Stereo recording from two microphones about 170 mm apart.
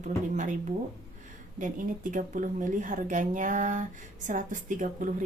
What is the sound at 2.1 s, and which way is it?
Speech, 50° right (ahead or behind).